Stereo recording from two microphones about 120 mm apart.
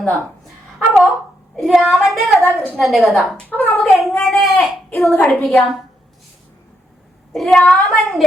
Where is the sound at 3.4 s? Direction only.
15° left (ahead or behind).